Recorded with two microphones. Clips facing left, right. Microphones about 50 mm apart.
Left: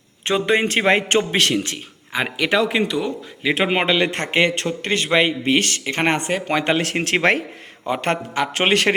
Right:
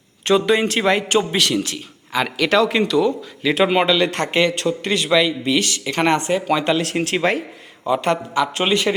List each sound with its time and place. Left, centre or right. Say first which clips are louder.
0.3 s speech: right 2 dB; left
2.2 s speech: right 2 dB; centre; by 7.0 s left
7.0 s a man's voice: left 1 dB; left
7.9 s a man's voice: right 3 dB; left